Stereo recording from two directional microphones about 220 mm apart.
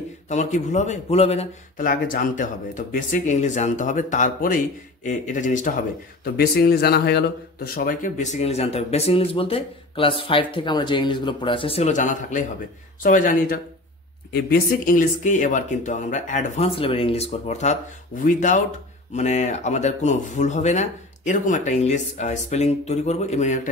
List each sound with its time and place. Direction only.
0.3 s a man's voice: 35° left (ahead or behind)